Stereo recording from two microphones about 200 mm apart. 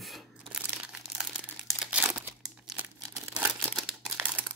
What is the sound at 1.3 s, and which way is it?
Crumpling, 5° right (ahead or behind).